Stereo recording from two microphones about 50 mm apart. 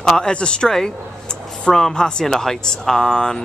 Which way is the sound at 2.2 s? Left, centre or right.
Centre.